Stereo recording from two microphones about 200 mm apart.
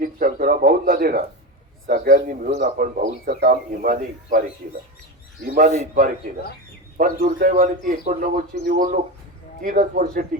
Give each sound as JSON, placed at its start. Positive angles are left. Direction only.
{"t": 0.0, "sound": "a man's voice", "side_deg": -45}
{"t": 5.7, "sound": "a man's voice", "side_deg": -35}